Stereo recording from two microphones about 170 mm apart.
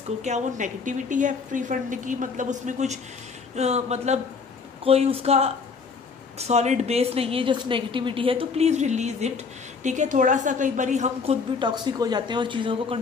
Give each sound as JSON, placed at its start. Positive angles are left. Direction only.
{"t": 0.2, "sound": "a woman's voice", "side_deg": -45}
{"t": 11.6, "sound": "a woman's voice", "side_deg": -25}